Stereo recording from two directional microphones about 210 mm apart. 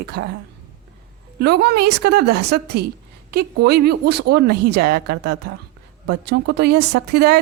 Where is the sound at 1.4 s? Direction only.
50° right (ahead or behind).